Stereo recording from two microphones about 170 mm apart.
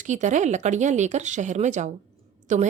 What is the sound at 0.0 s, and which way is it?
A woman's voice, 45° right (ahead or behind).